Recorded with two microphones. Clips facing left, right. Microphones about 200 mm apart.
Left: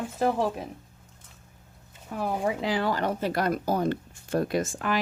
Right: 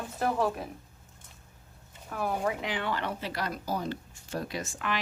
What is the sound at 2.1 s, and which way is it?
Speech, 25° left (ahead or behind).